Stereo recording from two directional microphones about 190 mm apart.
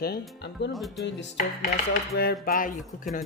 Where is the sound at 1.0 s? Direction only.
65° left (ahead or behind).